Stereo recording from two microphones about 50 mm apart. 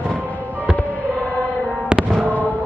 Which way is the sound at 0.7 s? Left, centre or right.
Left.